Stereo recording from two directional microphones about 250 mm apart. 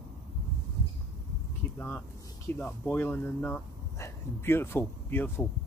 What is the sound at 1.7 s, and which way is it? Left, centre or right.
Speech, centre.